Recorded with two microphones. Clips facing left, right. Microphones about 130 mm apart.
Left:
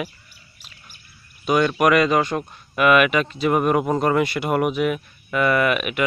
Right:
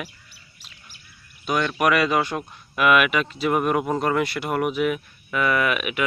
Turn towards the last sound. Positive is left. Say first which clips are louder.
# left 3 dB
turn(degrees=0)  # may be behind; listen again after turning